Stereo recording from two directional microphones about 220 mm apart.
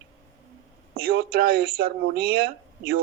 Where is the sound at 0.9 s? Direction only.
45° right (ahead or behind).